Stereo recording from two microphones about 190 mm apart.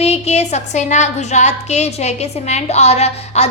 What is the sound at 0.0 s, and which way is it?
A woman's voice, 35° left (ahead or behind).